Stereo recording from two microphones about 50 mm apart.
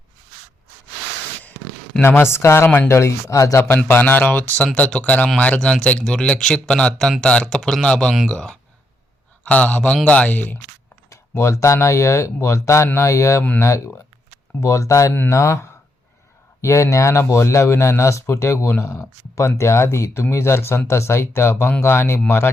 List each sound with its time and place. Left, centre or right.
2.0 s speech: left
3.8 s a man's voice: left
6.1 s a man's voice: centre
9.4 s a man's voice: left
11.1 s a man's voice: left
14.6 s speech: left
15.3 s a man's voice: left